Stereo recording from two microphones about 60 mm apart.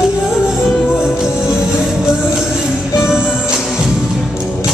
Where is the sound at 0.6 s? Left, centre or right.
Left.